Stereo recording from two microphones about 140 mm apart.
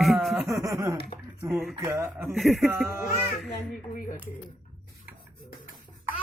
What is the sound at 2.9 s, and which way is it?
Speech, 20° right (ahead or behind).